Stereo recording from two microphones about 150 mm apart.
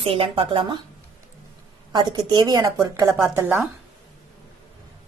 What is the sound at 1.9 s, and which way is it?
A woman's voice, 30° right (ahead or behind).